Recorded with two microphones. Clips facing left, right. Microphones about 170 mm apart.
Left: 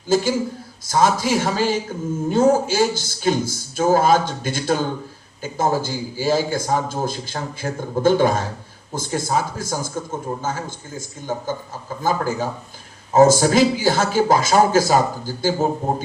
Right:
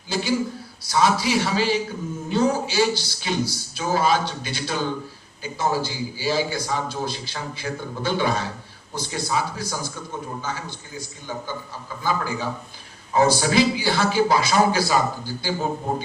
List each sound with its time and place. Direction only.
0.1 s a man's voice: 45° left (ahead or behind)